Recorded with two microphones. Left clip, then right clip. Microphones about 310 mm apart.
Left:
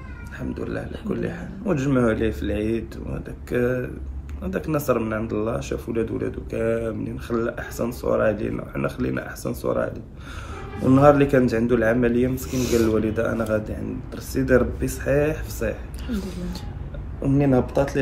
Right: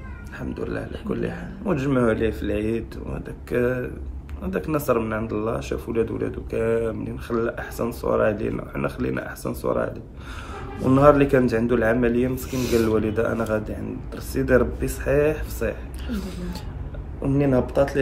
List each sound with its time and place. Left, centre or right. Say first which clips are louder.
0.4 s a man's voice: even; centre